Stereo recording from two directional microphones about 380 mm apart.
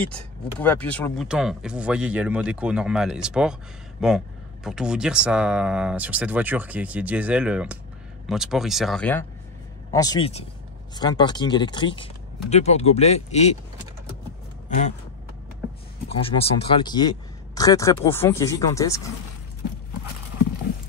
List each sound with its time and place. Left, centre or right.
0.0 s speech: centre
16.1 s speech: centre